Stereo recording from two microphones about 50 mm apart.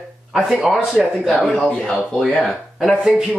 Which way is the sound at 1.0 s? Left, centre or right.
Centre.